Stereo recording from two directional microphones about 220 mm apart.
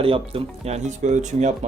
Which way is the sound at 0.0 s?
25° right (ahead or behind).